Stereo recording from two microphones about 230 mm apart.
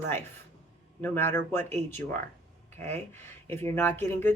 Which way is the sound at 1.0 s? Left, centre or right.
Centre.